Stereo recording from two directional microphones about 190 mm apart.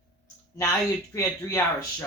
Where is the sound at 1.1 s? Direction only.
15° left (ahead or behind).